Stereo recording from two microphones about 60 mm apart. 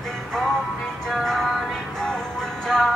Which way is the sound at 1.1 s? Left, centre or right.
Centre.